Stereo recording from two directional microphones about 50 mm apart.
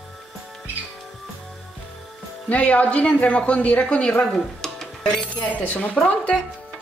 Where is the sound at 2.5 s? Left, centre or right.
Left.